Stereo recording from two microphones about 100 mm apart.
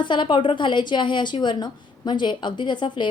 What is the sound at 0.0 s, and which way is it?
A woman's voice, 55° left (ahead or behind).